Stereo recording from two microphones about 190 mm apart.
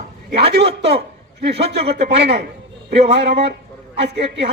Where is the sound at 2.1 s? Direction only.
60° right (ahead or behind).